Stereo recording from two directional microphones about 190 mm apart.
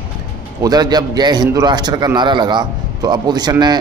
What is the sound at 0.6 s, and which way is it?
A man's voice, 20° right (ahead or behind).